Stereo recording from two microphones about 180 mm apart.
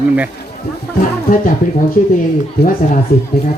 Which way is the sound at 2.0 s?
40° left (ahead or behind).